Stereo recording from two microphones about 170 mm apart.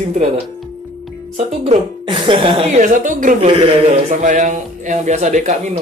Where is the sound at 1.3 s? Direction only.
40° right (ahead or behind).